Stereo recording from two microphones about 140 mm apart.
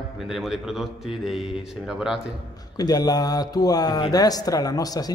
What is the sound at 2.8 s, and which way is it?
Speech, 30° left (ahead or behind).